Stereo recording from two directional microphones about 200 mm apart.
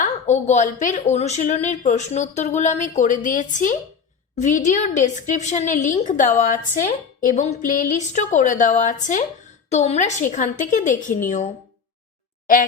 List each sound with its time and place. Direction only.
0.0 s a woman's voice: 35° left (ahead or behind)